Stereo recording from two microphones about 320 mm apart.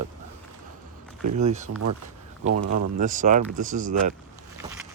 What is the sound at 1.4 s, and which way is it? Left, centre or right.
Speech, right.